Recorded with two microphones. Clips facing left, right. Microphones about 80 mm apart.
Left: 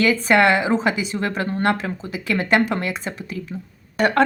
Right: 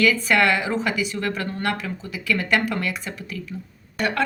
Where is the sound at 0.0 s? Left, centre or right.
Left.